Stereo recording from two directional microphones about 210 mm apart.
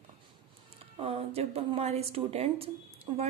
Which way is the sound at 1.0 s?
25° right (ahead or behind).